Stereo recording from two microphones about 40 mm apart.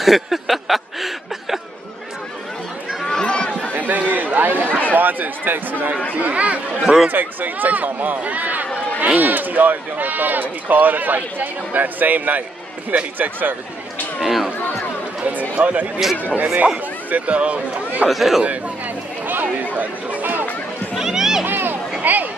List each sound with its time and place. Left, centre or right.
0.0 s speech: centre
3.1 s run: left
3.7 s a sound: right
4.1 s speech: right
6.1 s a man's voice: right
7.1 s speech: right
14.2 s speech: centre
15.5 s a man's voice: right
17.1 s a man's voice: right
18.0 s a man's voice: centre
19.2 s chatter: right
20.9 s a sound: centre
21.5 s a sound: right
22.0 s speech: right